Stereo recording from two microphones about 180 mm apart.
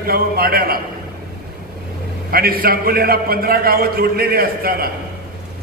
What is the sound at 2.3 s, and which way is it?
A man's voice, 55° right (ahead or behind).